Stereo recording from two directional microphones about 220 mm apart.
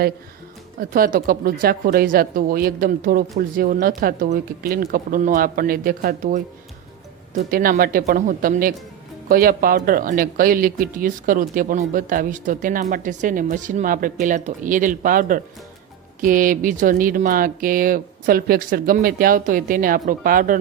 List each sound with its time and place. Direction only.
0.8 s speech: 40° right (ahead or behind)